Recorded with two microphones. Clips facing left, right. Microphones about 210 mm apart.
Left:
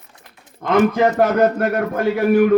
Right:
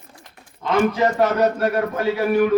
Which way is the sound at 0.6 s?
50° left (ahead or behind).